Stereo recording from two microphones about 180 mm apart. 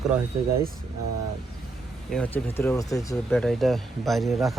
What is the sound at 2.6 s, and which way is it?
Speech, 15° left (ahead or behind).